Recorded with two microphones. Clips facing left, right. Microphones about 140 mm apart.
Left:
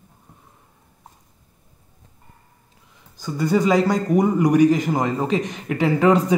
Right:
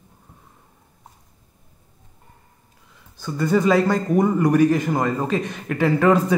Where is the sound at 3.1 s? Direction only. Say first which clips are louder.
Even; 15° left (ahead or behind).